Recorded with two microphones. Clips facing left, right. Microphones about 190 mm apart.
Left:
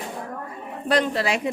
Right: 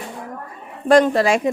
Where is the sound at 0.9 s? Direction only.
45° right (ahead or behind).